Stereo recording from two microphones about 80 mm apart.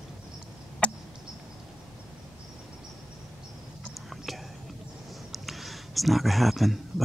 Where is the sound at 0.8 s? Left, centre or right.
Centre.